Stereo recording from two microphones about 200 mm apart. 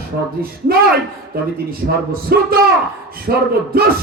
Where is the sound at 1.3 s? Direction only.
50° right (ahead or behind).